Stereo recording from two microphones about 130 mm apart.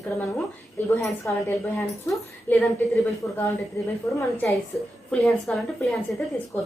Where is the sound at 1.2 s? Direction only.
15° left (ahead or behind).